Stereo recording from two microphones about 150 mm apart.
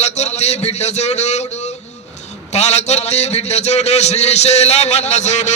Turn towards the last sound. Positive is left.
turn(degrees=50)  # may be behind; listen again after turning